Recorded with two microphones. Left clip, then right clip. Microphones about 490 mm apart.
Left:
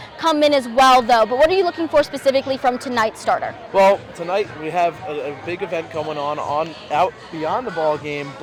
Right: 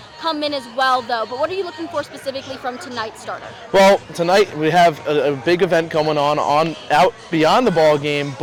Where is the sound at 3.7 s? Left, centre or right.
Right.